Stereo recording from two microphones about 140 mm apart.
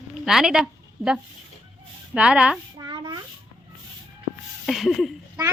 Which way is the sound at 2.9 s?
35° right (ahead or behind).